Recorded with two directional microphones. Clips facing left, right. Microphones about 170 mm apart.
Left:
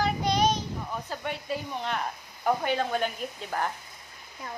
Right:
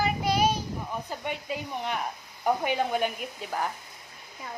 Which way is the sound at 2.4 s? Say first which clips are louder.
Even; 15° right (ahead or behind).